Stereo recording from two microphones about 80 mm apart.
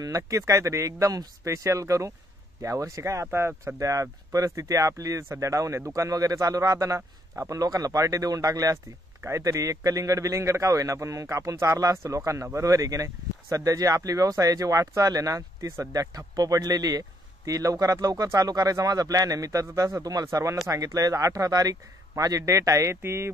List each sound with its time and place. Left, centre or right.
0.0 s a man's voice: right